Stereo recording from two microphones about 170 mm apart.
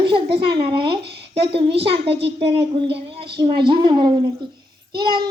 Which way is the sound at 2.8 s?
80° right.